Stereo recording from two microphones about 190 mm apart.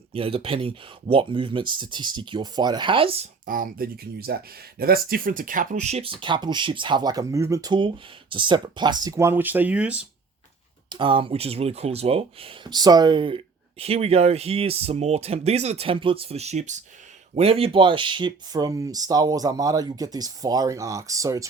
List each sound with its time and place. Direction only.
0.1 s speech: 30° right (ahead or behind)
3.4 s speech: 45° right (ahead or behind); by 10.0 s 5° right (ahead or behind)
10.8 s speech: 25° right (ahead or behind)